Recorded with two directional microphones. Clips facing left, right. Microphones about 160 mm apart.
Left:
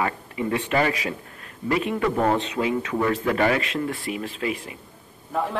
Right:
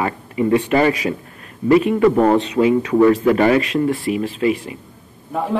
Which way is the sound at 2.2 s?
35° right (ahead or behind).